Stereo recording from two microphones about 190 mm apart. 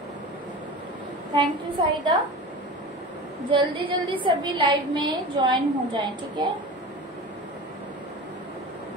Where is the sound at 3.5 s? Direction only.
25° right (ahead or behind).